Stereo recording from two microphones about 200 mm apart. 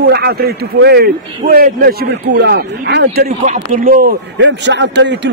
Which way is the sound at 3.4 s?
40° right (ahead or behind).